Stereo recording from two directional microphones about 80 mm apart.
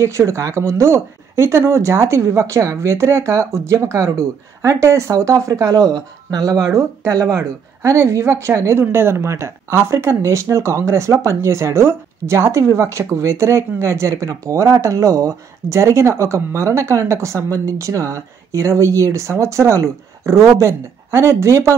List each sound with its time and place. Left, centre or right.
0.0 s speech: right